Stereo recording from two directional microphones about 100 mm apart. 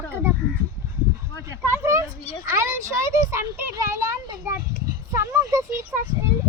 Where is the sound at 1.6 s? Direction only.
25° right (ahead or behind).